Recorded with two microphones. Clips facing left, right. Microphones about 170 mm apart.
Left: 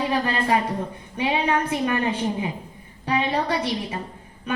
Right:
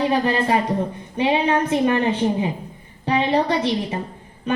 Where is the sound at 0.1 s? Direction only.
25° right (ahead or behind).